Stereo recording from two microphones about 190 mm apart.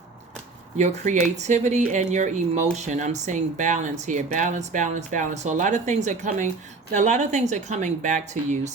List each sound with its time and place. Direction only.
0.8 s speech: 40° right (ahead or behind)